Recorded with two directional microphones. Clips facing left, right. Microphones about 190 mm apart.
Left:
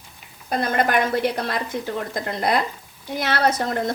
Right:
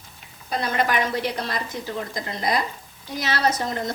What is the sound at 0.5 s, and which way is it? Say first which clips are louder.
A woman's voice: left 3 dB; 50° left (ahead or behind).